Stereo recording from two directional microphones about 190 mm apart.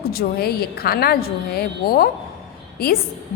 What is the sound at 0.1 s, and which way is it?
A woman's voice, 55° left (ahead or behind).